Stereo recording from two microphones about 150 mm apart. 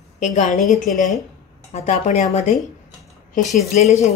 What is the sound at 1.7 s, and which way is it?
Speech, 50° left (ahead or behind).